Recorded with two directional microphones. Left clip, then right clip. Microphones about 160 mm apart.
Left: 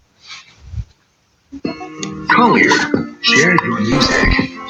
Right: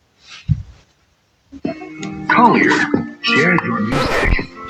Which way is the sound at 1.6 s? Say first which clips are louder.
Left 1 dB; 25° left (ahead or behind).